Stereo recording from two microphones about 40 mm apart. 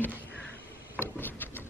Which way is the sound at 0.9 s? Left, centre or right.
Left.